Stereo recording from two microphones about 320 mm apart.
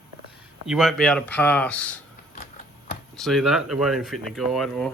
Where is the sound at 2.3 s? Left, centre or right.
Left.